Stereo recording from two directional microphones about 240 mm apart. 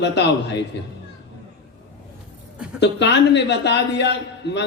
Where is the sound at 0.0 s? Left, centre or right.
Left.